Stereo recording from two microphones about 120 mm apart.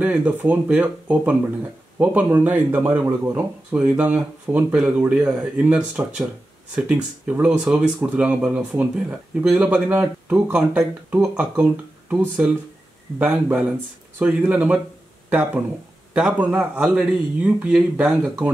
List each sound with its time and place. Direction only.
0.0 s speech: 15° right (ahead or behind)
13.2 s speech: 10° right (ahead or behind)
16.1 s speech: 10° right (ahead or behind)